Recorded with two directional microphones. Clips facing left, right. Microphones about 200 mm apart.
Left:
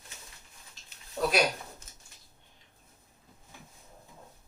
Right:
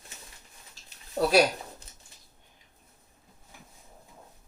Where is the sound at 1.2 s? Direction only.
40° right (ahead or behind).